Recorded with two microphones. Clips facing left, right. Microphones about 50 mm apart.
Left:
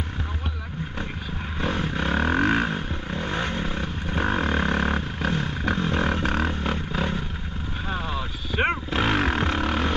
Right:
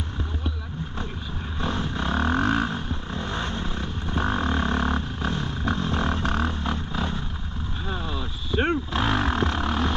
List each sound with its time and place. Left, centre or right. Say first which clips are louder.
1.6 s vehicle: left 2 dB; left
7.9 s roaring cats: left 2 dB; left